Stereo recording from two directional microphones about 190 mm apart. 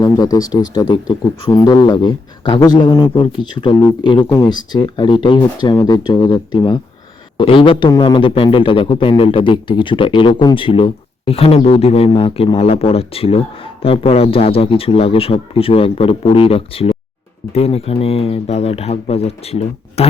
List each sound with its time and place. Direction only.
0.0 s speech: 20° left (ahead or behind)